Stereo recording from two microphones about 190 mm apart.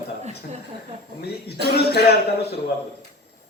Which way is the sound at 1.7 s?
55° left (ahead or behind).